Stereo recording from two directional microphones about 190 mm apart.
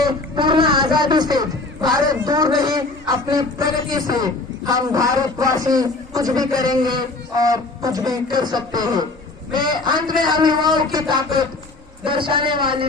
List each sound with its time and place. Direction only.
0.0 s speech: 25° right (ahead or behind)